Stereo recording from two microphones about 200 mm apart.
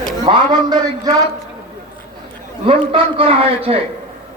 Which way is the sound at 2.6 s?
25° right (ahead or behind).